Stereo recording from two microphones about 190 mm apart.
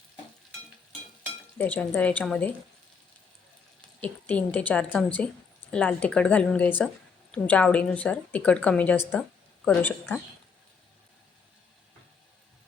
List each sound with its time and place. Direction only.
1.5 s a woman's voice: 10° left (ahead or behind)
3.8 s a woman's voice: 5° left (ahead or behind)